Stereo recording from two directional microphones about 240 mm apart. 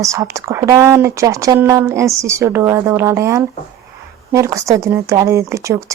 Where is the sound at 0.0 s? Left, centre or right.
Centre.